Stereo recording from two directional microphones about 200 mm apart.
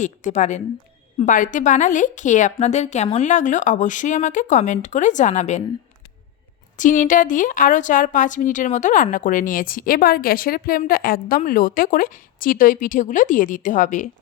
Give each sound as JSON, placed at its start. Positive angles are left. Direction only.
{"t": 0.0, "sound": "speech", "side_deg": 35}
{"t": 6.7, "sound": "speech", "side_deg": 40}